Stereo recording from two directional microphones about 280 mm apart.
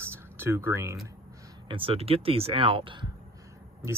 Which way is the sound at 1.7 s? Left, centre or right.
Centre.